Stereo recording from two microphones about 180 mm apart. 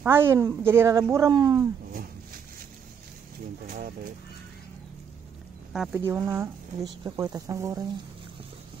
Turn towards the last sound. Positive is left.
turn(degrees=-20)  # may be behind; listen again after turning